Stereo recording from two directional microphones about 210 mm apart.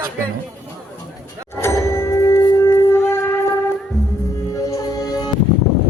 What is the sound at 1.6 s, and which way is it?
Music, 10° left (ahead or behind).